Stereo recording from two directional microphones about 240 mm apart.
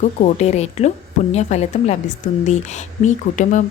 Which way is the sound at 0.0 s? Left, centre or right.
Left.